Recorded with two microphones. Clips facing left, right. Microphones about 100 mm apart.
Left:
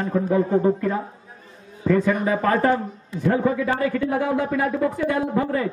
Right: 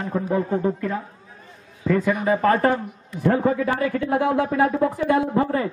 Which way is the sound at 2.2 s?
35° right (ahead or behind).